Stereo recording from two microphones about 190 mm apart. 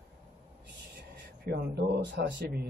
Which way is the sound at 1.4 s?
60° right (ahead or behind).